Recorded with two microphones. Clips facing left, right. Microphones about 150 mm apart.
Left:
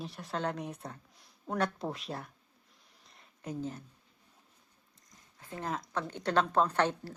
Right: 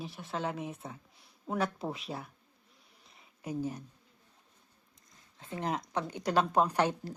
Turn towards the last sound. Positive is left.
turn(degrees=-10)  # may be behind; listen again after turning